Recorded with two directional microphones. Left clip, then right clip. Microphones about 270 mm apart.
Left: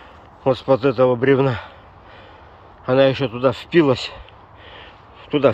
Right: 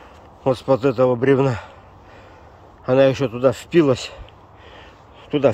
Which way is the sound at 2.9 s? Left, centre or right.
Centre.